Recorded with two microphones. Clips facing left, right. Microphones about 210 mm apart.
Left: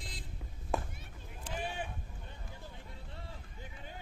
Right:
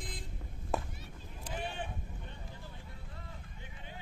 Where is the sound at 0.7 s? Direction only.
Centre (ahead or behind).